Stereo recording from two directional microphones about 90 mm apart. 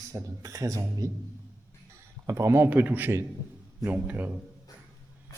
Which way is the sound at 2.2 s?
30° right (ahead or behind).